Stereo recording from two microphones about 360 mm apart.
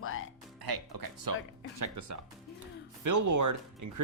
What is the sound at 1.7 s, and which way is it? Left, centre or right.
Speech, right.